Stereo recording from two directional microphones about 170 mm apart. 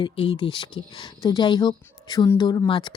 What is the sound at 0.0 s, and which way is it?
Speech, 30° left (ahead or behind).